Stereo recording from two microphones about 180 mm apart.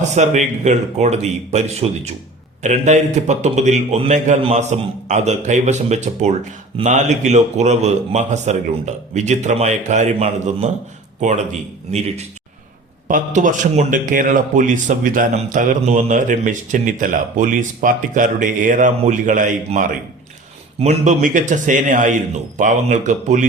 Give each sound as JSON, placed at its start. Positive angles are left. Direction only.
{"t": 0.1, "sound": "a man's voice", "side_deg": -40}
{"t": 11.9, "sound": "a man's voice", "side_deg": -35}
{"t": 20.7, "sound": "a man's voice", "side_deg": -35}